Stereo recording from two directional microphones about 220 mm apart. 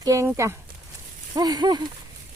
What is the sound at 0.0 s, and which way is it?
Speech, 15° right (ahead or behind).